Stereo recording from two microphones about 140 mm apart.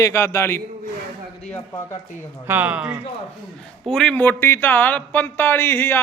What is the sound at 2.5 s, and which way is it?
Speech, 10° right (ahead or behind).